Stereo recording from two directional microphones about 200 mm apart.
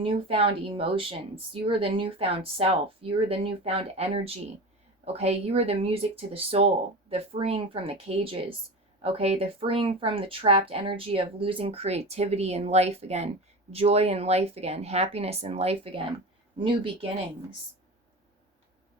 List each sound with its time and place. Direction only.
0.0 s speech: 25° right (ahead or behind)